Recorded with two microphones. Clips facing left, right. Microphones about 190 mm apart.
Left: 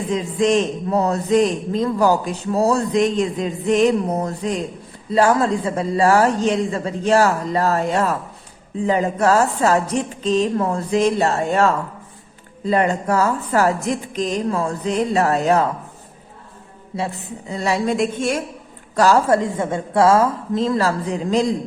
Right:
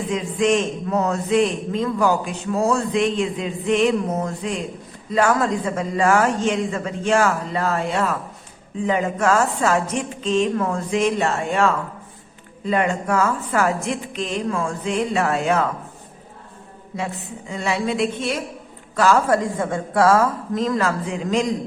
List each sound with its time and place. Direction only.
0.1 s a man's voice: 35° left (ahead or behind)
17.5 s a woman's voice: 40° left (ahead or behind)
18.9 s a woman's voice: 35° left (ahead or behind)